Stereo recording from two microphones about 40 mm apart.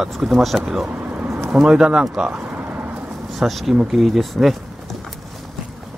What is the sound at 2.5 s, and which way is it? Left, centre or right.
Vehicle, right.